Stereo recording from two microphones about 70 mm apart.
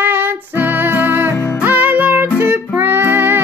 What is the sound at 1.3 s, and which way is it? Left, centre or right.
Music, left.